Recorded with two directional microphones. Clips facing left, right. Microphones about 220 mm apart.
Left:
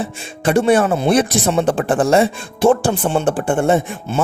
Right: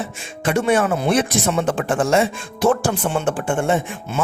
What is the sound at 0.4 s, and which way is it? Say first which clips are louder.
Speech: left 4 dB; 35° left (ahead or behind).